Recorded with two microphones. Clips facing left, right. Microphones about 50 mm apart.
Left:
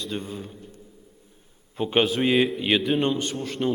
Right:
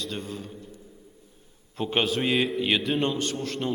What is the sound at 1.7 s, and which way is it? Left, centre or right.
A man's voice, centre.